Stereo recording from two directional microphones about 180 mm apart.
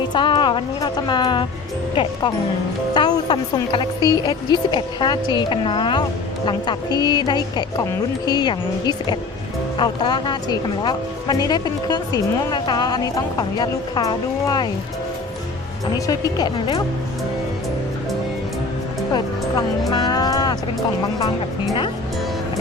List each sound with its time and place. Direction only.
0.1 s music: 25° left (ahead or behind)
2.0 s speech: 25° left (ahead or behind)
16.0 s speech: 20° left (ahead or behind)
19.9 s music: 20° left (ahead or behind)